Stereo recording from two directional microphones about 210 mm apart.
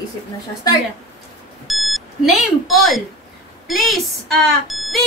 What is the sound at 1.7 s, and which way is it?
Smoke detector, centre (ahead or behind).